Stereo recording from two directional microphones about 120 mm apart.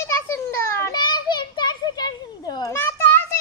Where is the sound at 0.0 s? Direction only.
25° left (ahead or behind).